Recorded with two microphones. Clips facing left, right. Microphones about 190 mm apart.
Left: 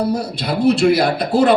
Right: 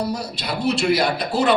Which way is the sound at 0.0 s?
55° left (ahead or behind).